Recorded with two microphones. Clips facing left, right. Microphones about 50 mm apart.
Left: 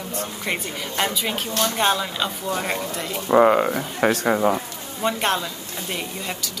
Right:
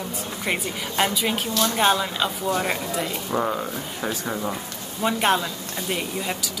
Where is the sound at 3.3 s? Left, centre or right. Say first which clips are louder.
Left 11 dB; left.